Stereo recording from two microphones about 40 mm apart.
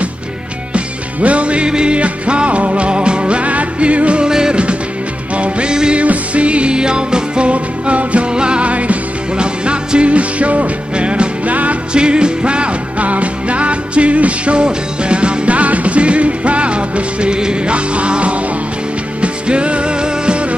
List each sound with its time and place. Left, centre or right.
0.7 s music: right
4.2 s music: centre
5.3 s music: right